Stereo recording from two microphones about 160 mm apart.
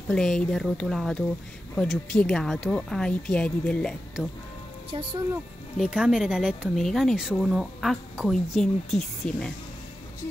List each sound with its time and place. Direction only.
0.1 s speech: 5° left (ahead or behind)
4.9 s speech: 35° right (ahead or behind)
5.8 s speech: 5° right (ahead or behind)